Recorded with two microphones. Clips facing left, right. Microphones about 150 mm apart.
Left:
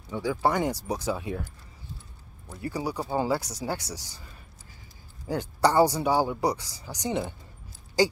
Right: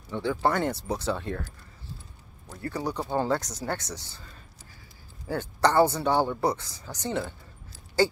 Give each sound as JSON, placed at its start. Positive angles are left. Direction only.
{"t": 0.1, "sound": "speech", "side_deg": 10}
{"t": 2.6, "sound": "speech", "side_deg": 10}
{"t": 5.3, "sound": "speech", "side_deg": 10}